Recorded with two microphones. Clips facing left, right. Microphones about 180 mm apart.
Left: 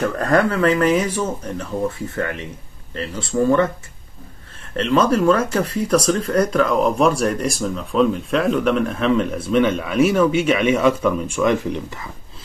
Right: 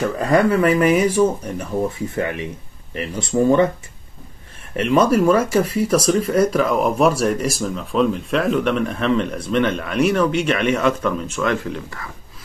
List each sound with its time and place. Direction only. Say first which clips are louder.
0.0 s speech: right 1 dB; 10° right (ahead or behind)
4.7 s speech: right 1 dB; 10° right (ahead or behind); by 12.1 s 20° left (ahead or behind)